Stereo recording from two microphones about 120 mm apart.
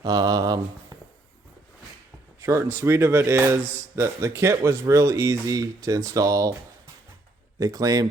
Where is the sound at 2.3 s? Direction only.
25° right (ahead or behind).